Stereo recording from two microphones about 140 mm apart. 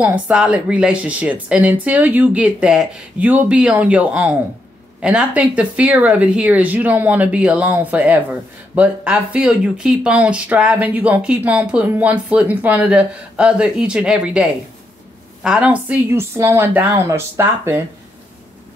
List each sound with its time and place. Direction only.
0.0 s speech: 5° right (ahead or behind)